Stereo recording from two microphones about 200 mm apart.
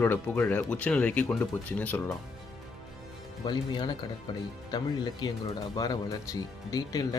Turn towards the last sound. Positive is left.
turn(degrees=20)  # may be behind; listen again after turning